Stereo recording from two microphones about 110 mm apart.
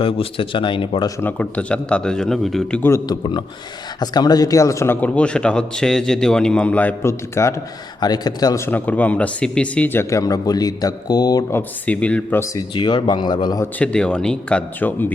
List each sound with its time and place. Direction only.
0.0 s speech: 55° left (ahead or behind)
1.2 s a man's voice: 15° left (ahead or behind)
3.1 s speech: 45° left (ahead or behind); by 4.9 s 25° left (ahead or behind)
4.9 s a man's voice: 10° left (ahead or behind)
8.0 s speech: 35° left (ahead or behind)
8.6 s speech: 15° left (ahead or behind); by 11.4 s 40° left (ahead or behind)
11.5 s a man's voice: 10° left (ahead or behind)
12.7 s speech: 45° left (ahead or behind)
13.7 s a man's voice: 10° left (ahead or behind)